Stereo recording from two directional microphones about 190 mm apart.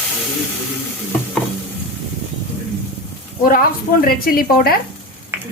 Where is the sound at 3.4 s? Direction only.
50° left (ahead or behind).